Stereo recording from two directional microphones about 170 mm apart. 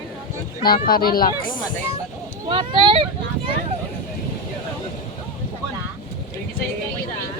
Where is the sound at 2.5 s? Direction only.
30° right (ahead or behind).